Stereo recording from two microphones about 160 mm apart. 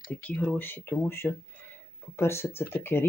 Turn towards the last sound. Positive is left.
turn(degrees=15)  # may be behind; listen again after turning